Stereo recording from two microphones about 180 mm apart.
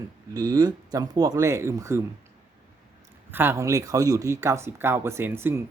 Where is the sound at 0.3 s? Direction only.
20° right (ahead or behind).